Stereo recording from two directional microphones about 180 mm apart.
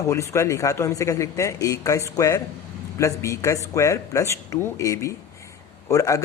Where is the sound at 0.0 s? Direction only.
15° left (ahead or behind).